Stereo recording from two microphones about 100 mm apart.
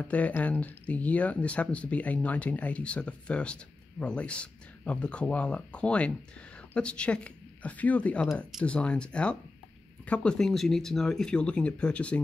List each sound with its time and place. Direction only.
0.1 s speech: 15° left (ahead or behind)